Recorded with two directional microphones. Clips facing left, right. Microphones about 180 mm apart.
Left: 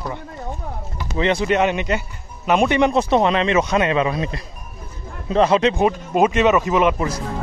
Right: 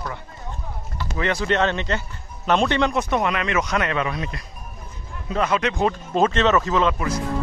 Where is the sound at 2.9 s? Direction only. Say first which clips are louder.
Left 6 dB; 25° left (ahead or behind).